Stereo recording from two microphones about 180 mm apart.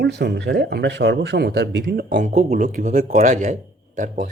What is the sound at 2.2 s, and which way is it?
Speech, 40° right (ahead or behind).